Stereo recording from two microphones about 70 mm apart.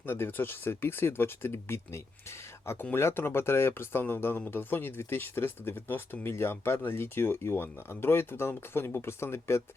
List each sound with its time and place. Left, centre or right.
0.0 s speech: left